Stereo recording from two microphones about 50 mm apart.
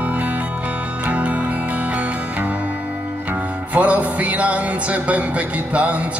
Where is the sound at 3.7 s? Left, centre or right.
Right.